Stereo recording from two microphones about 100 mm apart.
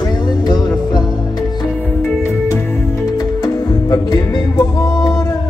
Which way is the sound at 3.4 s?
40° left (ahead or behind).